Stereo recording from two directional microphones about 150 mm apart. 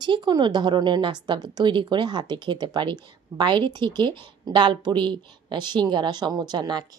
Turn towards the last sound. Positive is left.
turn(degrees=-30)  # may be behind; listen again after turning